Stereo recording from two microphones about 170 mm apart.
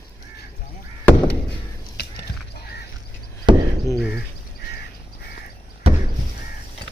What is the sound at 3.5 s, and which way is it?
Chop, 25° right (ahead or behind).